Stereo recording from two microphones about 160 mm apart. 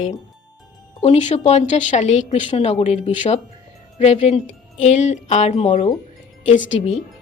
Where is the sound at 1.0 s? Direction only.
40° left (ahead or behind).